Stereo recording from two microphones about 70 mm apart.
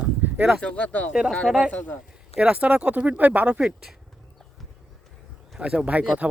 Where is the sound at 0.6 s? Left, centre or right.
Centre.